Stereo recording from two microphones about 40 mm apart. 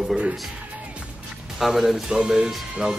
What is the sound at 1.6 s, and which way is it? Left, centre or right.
Speech, centre.